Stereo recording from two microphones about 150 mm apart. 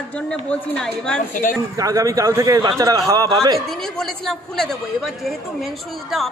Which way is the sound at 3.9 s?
Centre (ahead or behind).